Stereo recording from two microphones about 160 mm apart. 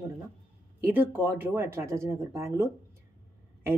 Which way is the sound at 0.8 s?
15° right (ahead or behind).